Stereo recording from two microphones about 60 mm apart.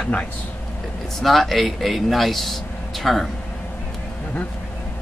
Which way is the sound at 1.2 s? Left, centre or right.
Centre.